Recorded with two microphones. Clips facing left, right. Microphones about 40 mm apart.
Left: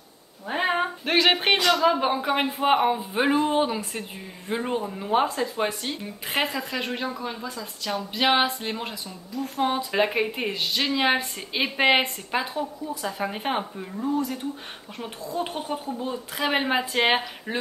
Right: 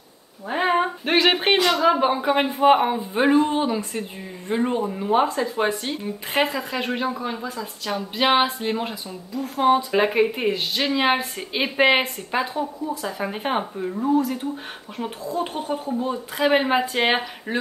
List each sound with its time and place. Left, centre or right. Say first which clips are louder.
0.5 s a sound: right 4 dB; centre
1.6 s a woman's voice: right 2 dB; right
2.0 s a woman's voice: right 4 dB; centre
10.5 s a woman's voice: right 2 dB; centre
14.0 s a woman's voice: right 5 dB; right
15.7 s speech: right 4 dB; centre